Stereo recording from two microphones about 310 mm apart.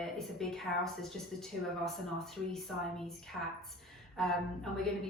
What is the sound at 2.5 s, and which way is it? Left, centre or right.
Speech, centre.